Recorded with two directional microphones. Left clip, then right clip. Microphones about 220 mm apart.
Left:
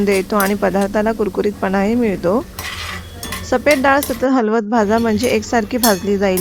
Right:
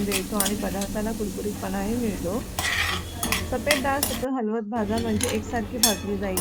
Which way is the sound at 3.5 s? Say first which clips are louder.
Left 13 dB; 50° left (ahead or behind).